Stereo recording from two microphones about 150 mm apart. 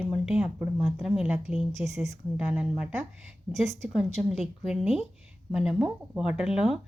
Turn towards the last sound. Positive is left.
turn(degrees=-5)  # may be behind; listen again after turning